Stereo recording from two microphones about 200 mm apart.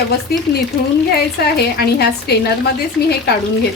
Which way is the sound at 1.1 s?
50° left (ahead or behind).